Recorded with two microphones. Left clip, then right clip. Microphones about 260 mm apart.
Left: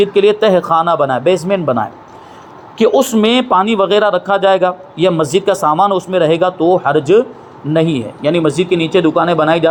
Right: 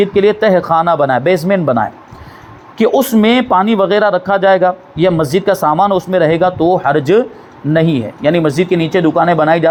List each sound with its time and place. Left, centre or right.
0.0 s speech: right